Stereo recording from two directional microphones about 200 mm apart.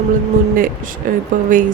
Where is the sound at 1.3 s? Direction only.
40° right (ahead or behind).